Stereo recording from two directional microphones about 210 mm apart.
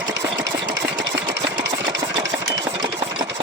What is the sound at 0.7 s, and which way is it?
Engine, 5° right (ahead or behind).